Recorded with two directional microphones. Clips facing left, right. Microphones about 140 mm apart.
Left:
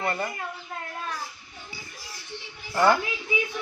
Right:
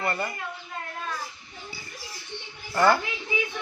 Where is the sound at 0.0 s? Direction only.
15° left (ahead or behind).